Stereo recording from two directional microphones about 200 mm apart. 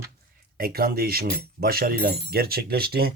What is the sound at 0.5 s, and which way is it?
Speech, 50° right (ahead or behind).